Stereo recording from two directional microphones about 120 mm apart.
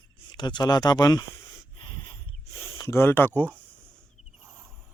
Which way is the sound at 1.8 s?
45° left (ahead or behind).